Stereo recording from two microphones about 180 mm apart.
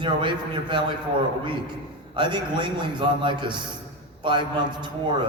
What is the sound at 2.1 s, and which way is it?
A man's voice, 25° right (ahead or behind).